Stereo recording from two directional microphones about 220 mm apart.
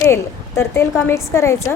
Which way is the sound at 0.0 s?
10° left (ahead or behind).